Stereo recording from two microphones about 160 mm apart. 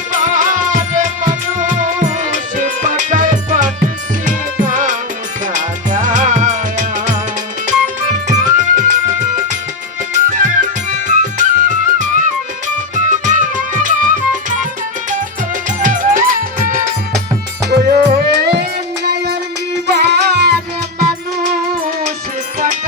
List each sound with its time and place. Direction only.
0.1 s music: 55° right (ahead or behind)
8.4 s music: 55° right (ahead or behind)
15.8 s music: 55° right (ahead or behind)
17.7 s music: 70° right (ahead or behind); by 20.5 s 90° right